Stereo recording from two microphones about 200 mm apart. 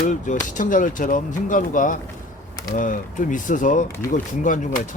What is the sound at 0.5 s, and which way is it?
Speech, 40° left (ahead or behind).